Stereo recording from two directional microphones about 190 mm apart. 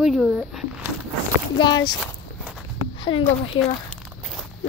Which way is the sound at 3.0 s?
30° left (ahead or behind).